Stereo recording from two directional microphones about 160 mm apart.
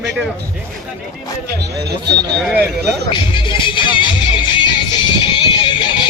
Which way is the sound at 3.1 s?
30° left (ahead or behind).